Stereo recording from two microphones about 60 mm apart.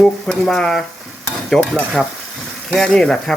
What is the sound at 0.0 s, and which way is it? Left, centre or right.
Speech, centre.